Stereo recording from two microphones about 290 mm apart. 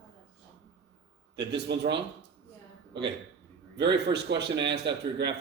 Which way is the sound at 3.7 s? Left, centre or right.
Right.